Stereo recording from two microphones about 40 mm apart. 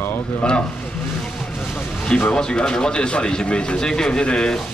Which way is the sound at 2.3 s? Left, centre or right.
Left.